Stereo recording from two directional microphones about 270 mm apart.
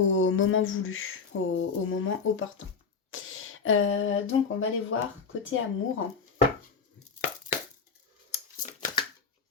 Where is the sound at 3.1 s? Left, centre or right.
Left.